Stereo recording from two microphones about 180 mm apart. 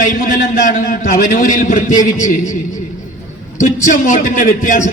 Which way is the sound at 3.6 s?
45° left (ahead or behind).